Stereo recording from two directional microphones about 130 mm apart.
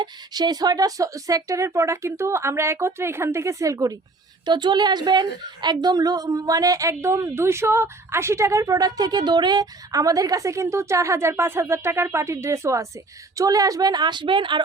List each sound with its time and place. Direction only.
0.0 s a woman's voice: 30° right (ahead or behind)
4.4 s a woman's voice: 35° right (ahead or behind)